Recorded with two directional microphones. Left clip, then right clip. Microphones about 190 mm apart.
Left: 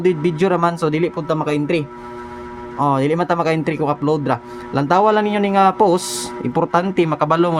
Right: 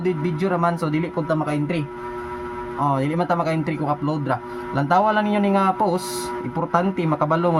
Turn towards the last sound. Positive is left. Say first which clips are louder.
# left 4 dB
turn(degrees=45)  # may be behind; listen again after turning